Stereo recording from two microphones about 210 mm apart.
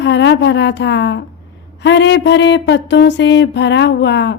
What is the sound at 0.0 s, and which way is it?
Speech, 55° left (ahead or behind).